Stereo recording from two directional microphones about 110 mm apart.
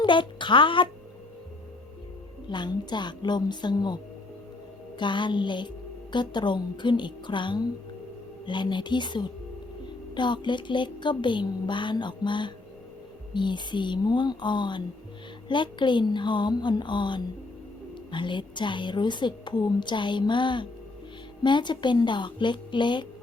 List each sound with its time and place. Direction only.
0.0 s a child's voice: 45° left (ahead or behind)
2.5 s a woman's voice: 40° left (ahead or behind)